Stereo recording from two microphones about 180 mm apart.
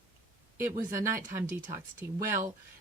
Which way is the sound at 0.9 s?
15° right (ahead or behind).